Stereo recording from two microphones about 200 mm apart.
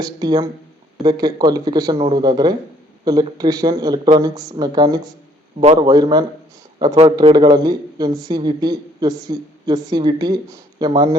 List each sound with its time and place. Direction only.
0.0 s a woman's voice: 20° right (ahead or behind)